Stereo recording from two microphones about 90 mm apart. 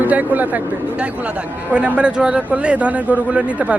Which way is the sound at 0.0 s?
20° right (ahead or behind).